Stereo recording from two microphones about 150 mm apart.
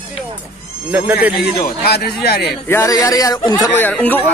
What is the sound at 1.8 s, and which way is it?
Speech, 90° left.